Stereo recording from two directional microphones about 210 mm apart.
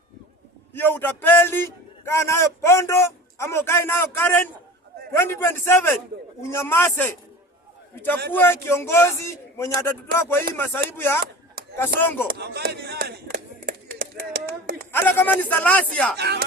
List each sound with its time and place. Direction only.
0.7 s a man's voice: 10° left (ahead or behind)
8.3 s a man's voice: 10° left (ahead or behind)
12.3 s a sound: 50° right (ahead or behind)
14.9 s a man's voice: 10° left (ahead or behind)
16.1 s speech: 50° right (ahead or behind)